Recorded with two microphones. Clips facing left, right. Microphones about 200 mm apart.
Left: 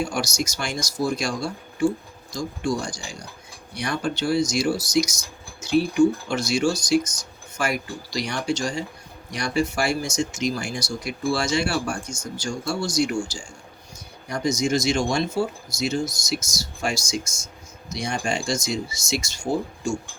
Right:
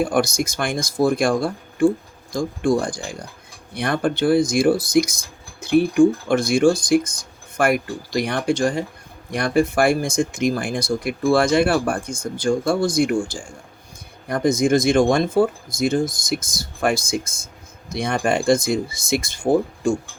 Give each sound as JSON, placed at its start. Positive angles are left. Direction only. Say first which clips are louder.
{"t": 0.0, "sound": "speech", "louder": "right 6 dB", "side_deg": -55}